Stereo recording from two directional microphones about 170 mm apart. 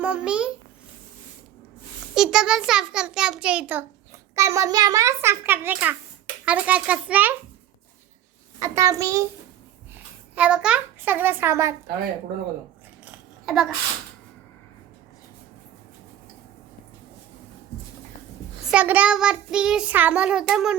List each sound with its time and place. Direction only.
0.0 s a child's voice: 5° right (ahead or behind)
2.1 s child singing: 5° right (ahead or behind)
4.4 s a child's voice: 20° right (ahead or behind)
8.5 s a child's voice: 20° right (ahead or behind)
9.9 s a child's voice: 10° right (ahead or behind)
13.1 s a sound: 5° right (ahead or behind)
18.7 s child singing: 10° right (ahead or behind)